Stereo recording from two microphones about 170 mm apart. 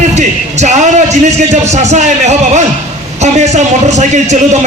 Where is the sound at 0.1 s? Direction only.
45° right (ahead or behind).